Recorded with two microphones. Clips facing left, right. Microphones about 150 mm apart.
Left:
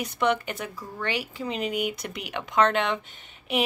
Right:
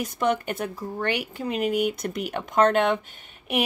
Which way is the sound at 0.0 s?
45° right (ahead or behind).